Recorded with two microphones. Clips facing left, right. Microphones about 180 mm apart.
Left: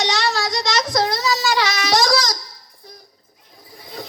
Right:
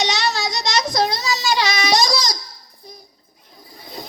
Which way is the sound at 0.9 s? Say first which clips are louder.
Left 1 dB; 15° right (ahead or behind).